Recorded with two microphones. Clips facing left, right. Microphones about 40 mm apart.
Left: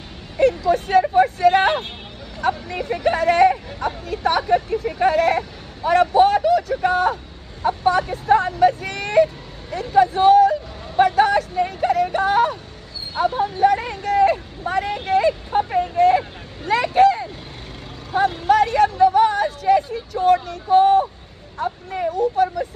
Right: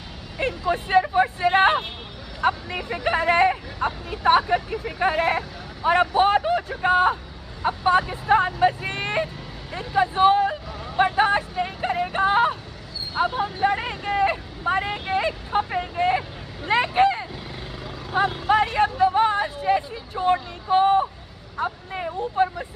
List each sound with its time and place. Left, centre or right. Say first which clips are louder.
0.4 s a woman's voice: left 7 dB; right
19.1 s a sound: left 4 dB; right
20.7 s a woman's voice: left 4 dB; right
22.2 s a woman's voice: left 3 dB; right